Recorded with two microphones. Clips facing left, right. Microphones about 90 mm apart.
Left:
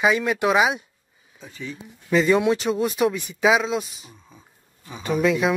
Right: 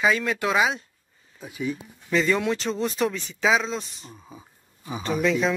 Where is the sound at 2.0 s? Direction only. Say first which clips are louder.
Left 4 dB; 15° left (ahead or behind).